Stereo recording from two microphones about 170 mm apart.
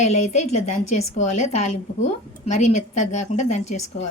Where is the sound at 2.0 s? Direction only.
40° left (ahead or behind).